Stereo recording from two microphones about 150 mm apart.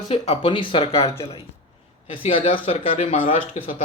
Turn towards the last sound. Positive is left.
turn(degrees=60)  # may be behind; listen again after turning